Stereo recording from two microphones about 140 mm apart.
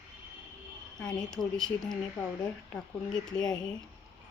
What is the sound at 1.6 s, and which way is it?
Speech, 5° left (ahead or behind).